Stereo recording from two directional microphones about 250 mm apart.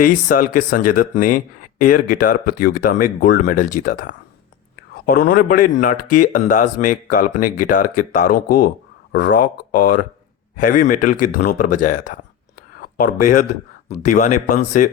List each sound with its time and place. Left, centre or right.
0.0 s speech: left